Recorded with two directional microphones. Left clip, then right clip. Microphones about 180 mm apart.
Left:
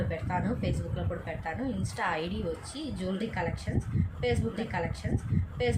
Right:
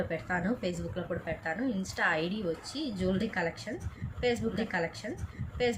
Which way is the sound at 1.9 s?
15° right (ahead or behind).